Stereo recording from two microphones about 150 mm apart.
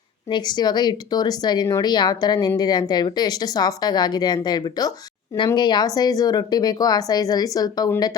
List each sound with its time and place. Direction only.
0.3 s speech: 30° left (ahead or behind)